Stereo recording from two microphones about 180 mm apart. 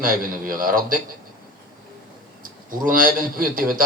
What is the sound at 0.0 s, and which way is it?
Speech, 50° right (ahead or behind).